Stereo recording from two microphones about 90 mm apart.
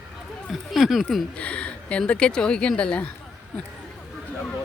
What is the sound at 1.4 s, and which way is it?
Speech, 15° left (ahead or behind).